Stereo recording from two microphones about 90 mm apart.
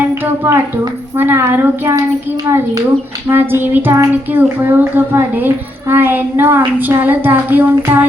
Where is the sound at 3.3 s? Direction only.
25° right (ahead or behind).